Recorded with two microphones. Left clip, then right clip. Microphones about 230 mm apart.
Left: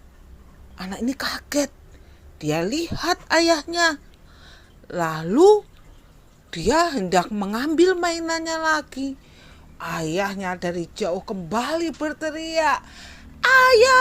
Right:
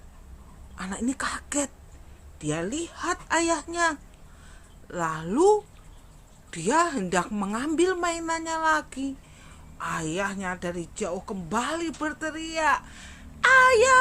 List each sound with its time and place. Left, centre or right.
0.8 s a woman's voice: centre
4.4 s a sound: left
6.5 s a woman's voice: left